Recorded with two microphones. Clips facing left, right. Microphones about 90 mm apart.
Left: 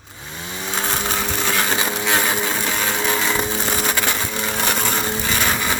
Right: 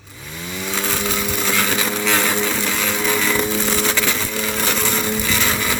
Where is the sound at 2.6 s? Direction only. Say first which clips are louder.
Even; 30° left (ahead or behind).